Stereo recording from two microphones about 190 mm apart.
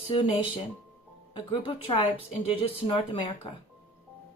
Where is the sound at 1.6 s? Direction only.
25° left (ahead or behind).